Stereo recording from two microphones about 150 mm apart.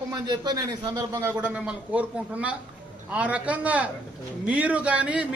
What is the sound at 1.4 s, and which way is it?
A woman's voice, 10° right (ahead or behind).